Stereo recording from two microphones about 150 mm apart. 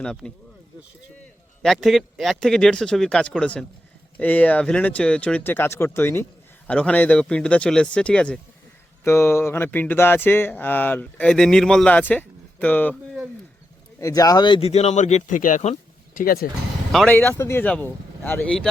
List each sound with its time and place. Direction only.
0.0 s speech: 5° left (ahead or behind)
14.0 s speech: 25° left (ahead or behind); by 16.2 s 50° left (ahead or behind)
16.2 s speech: 85° left
17.1 s speech: 15° left (ahead or behind)